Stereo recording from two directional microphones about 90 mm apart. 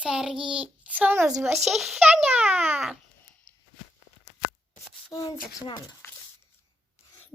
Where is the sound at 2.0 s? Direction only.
10° right (ahead or behind).